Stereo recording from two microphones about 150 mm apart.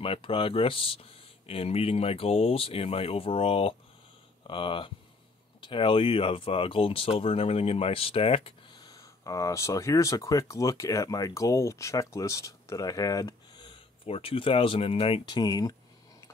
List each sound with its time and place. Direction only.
0.0 s speech: 35° left (ahead or behind)